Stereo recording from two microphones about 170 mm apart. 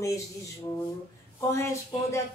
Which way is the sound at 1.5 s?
15° left (ahead or behind).